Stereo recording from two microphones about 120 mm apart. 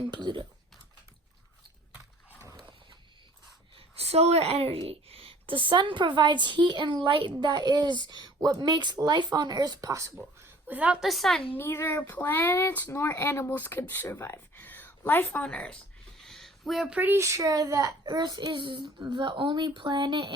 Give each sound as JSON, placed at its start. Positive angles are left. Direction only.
{"t": 0.1, "sound": "a child's voice", "side_deg": -40}
{"t": 3.8, "sound": "a woman's voice", "side_deg": -60}
{"t": 10.7, "sound": "a woman's voice", "side_deg": -10}
{"t": 11.1, "sound": "a woman's voice", "side_deg": 0}
{"t": 11.5, "sound": "speech", "side_deg": 20}
{"t": 16.2, "sound": "a sound", "side_deg": 5}
{"t": 17.0, "sound": "a child's voice", "side_deg": -20}